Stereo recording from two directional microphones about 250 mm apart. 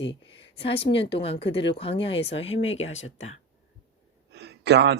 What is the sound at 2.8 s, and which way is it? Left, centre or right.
Speech, left.